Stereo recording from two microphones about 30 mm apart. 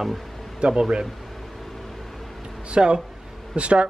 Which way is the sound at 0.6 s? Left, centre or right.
Right.